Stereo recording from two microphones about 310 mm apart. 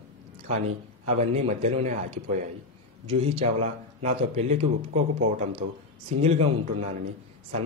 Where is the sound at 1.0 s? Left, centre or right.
Centre.